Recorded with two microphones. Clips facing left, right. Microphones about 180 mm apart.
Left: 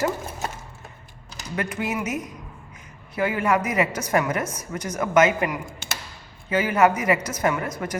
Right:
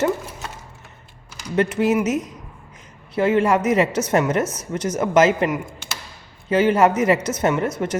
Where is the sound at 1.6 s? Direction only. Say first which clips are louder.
Right 9 dB; 30° right (ahead or behind).